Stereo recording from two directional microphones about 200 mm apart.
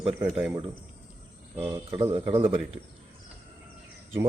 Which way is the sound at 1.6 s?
20° right (ahead or behind).